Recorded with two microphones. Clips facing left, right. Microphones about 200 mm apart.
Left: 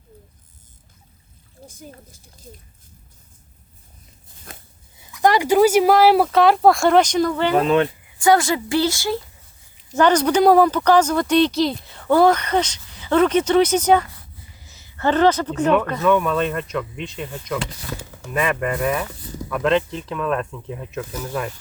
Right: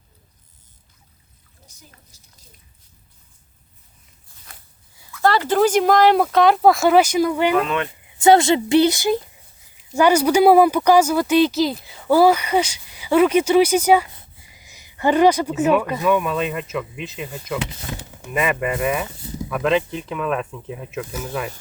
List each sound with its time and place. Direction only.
1.6 s speech: 50° left (ahead or behind)
5.1 s speech: 15° left (ahead or behind); by 7.5 s 10° right (ahead or behind)
7.5 s speech: 35° left (ahead or behind)
8.2 s a woman's voice: 25° right (ahead or behind); by 21.5 s 5° right (ahead or behind)